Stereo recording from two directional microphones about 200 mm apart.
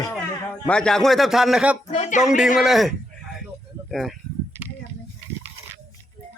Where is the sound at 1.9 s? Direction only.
35° left (ahead or behind).